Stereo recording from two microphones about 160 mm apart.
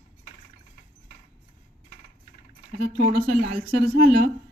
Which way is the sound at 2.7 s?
75° right (ahead or behind).